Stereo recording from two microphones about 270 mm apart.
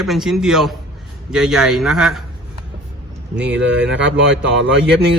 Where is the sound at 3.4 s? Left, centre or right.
Right.